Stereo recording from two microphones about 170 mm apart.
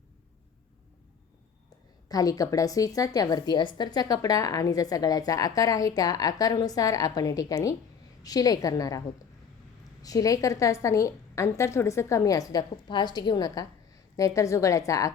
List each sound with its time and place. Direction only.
2.0 s a woman's voice: 20° left (ahead or behind)
10.0 s a woman's voice: 20° left (ahead or behind)